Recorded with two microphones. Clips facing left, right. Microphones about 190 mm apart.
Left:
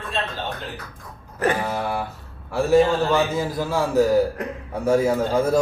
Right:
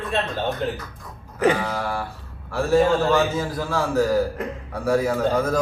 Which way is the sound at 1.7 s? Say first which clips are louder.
Left 1 dB; 20° left (ahead or behind).